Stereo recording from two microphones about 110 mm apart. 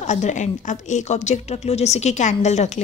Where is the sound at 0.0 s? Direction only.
90° left.